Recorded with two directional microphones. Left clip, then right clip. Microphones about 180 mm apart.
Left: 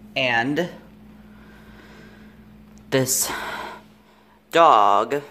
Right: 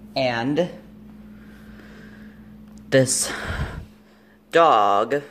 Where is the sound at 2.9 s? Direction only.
Centre (ahead or behind).